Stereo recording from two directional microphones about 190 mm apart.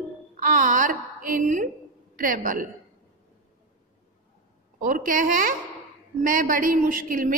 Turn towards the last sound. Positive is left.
turn(degrees=-45)  # may be behind; listen again after turning